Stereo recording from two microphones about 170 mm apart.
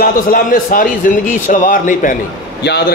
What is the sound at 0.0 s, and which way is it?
A man's voice, 55° left (ahead or behind).